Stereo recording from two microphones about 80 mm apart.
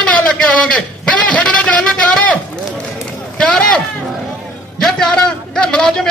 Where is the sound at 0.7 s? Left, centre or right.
Centre.